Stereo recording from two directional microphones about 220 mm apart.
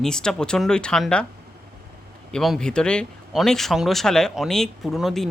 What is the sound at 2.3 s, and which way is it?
Speech, centre (ahead or behind).